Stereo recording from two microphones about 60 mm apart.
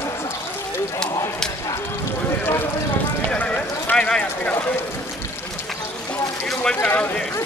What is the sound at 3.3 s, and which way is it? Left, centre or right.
Speech, left.